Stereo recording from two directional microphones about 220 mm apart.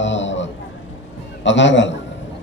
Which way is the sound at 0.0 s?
55° left (ahead or behind).